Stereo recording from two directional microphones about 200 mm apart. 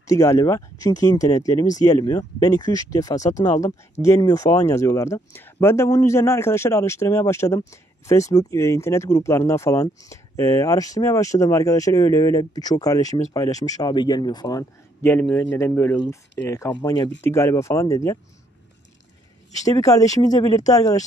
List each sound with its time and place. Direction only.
0.0 s speech: 15° left (ahead or behind)
19.6 s speech: 15° left (ahead or behind)